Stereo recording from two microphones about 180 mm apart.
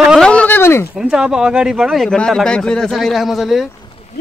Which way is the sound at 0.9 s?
5° right (ahead or behind).